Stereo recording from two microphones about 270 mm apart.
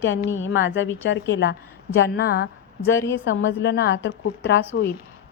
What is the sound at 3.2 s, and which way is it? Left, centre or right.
A woman's voice, left.